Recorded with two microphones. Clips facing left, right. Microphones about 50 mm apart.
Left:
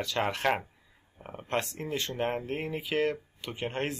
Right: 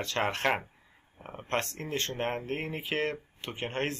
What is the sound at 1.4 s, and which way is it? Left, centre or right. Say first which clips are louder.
Speech: even; right.